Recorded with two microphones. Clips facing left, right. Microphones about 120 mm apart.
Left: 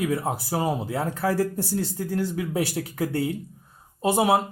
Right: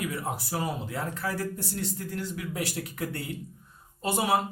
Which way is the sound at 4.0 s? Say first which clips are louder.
Left 6 dB; 25° left (ahead or behind).